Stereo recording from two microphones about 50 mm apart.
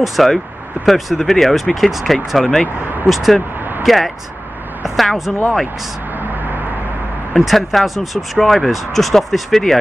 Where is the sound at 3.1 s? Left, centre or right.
Centre.